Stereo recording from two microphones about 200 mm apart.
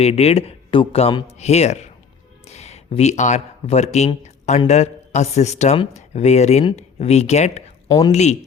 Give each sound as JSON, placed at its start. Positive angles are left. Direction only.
{"t": 0.0, "sound": "speech", "side_deg": 30}